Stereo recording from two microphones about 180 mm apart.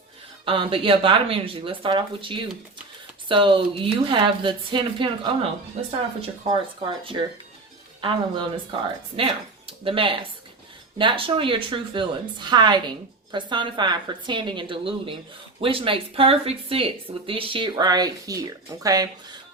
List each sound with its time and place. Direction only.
0.4 s a woman's voice: 30° right (ahead or behind)